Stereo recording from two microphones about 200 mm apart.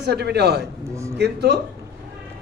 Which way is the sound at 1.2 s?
55° right (ahead or behind).